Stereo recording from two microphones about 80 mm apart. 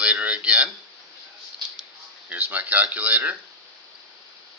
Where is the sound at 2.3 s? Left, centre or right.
Right.